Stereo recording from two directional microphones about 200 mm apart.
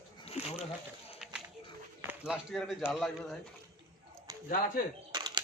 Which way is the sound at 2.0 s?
5° right (ahead or behind).